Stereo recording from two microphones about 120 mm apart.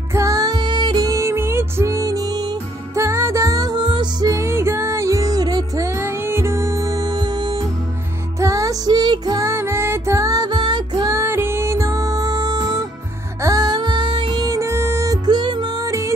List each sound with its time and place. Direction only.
0.1 s music: 30° right (ahead or behind)
8.4 s music: 25° right (ahead or behind)
11.1 s music: 20° right (ahead or behind); by 14.4 s 45° right (ahead or behind)
14.4 s music: 25° right (ahead or behind)